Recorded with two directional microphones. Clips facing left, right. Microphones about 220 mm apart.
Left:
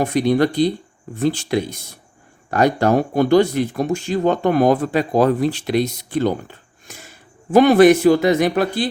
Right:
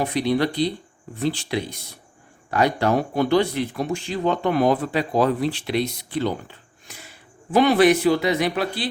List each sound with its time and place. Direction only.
0.0 s speech: 45° left (ahead or behind)